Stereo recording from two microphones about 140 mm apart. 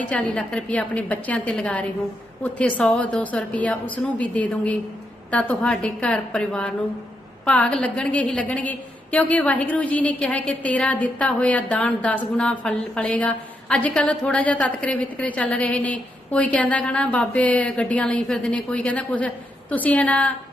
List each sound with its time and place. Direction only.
0.0 s a woman's voice: 10° left (ahead or behind)